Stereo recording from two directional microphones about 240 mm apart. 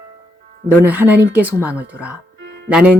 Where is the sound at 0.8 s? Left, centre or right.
Centre.